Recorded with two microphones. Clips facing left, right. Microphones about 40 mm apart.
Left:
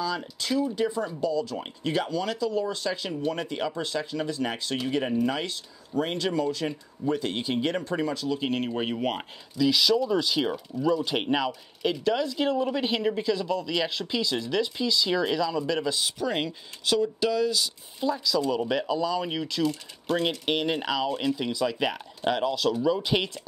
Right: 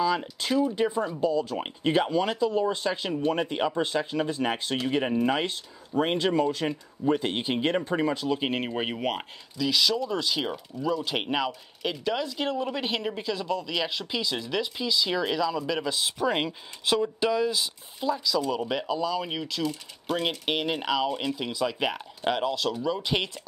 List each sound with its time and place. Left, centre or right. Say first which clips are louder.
0.0 s speech: right 4 dB; right
8.5 s speech: left 1 dB; centre
16.2 s speech: right 2 dB; centre
18.0 s speech: left 1 dB; centre
21.1 s speech: left 2 dB; centre
21.4 s speech: left 1 dB; centre